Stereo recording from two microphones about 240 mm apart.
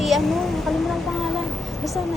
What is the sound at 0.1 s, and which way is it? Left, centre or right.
Vehicle, centre.